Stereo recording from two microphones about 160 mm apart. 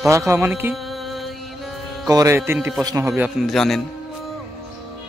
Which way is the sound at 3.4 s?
Centre (ahead or behind).